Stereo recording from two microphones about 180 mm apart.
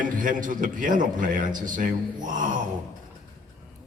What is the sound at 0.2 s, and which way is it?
A man's voice, 45° right (ahead or behind).